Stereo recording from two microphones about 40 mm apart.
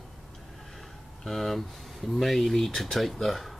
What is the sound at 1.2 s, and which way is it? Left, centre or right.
Speech, centre.